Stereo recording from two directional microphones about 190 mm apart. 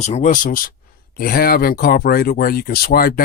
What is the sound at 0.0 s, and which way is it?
Speech, 40° left (ahead or behind).